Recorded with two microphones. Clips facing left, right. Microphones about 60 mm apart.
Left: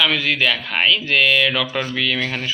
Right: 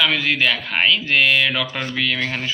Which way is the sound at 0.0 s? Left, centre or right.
Right.